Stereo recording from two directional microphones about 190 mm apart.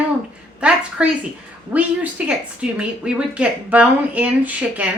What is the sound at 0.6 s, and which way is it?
A woman's voice, 5° right (ahead or behind).